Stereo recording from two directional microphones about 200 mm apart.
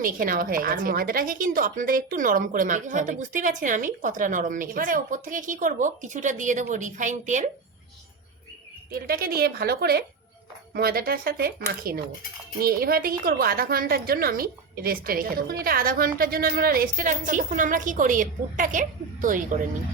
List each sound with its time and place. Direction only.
0.0 s a woman's voice: 45° right (ahead or behind)
8.9 s a woman's voice: 45° right (ahead or behind)